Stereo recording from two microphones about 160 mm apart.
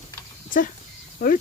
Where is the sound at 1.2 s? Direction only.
70° left (ahead or behind).